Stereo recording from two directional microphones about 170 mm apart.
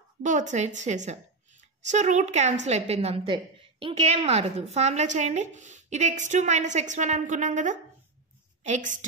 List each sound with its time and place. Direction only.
0.2 s speech: 45° right (ahead or behind)